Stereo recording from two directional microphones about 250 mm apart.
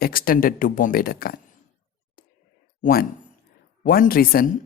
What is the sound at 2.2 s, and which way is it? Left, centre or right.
Whispering, left.